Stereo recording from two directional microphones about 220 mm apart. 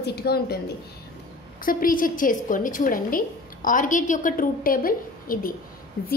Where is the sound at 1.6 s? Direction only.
40° left (ahead or behind).